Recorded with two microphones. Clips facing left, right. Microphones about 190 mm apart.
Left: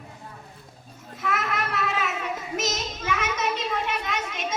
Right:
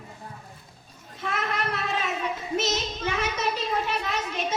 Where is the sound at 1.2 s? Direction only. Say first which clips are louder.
Left 1 dB; 30° right (ahead or behind).